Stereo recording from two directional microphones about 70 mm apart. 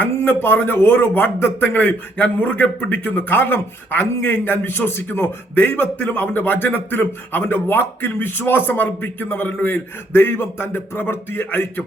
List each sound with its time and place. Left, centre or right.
0.2 s a man's voice: left